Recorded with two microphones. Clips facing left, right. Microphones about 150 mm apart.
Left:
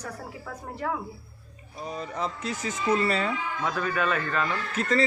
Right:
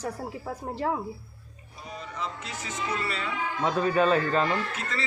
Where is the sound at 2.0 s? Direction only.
40° left (ahead or behind).